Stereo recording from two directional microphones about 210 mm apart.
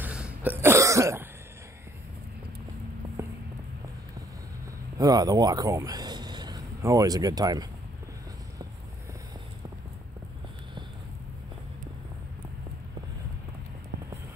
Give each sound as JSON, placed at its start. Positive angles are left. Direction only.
{"t": 0.0, "sound": "cough", "side_deg": -5}
{"t": 3.2, "sound": "a sound", "side_deg": -10}
{"t": 4.9, "sound": "speech", "side_deg": -20}